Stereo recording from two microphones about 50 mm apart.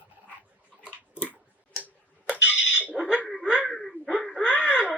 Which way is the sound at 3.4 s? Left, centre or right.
Centre.